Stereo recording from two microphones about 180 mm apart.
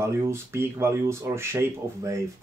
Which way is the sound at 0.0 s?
15° right (ahead or behind).